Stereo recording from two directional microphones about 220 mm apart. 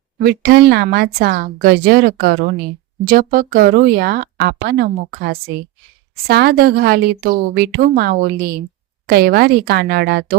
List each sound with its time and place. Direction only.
0.2 s speech: 45° right (ahead or behind)